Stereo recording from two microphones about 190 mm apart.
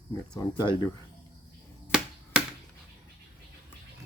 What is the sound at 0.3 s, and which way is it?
Speech, 25° left (ahead or behind).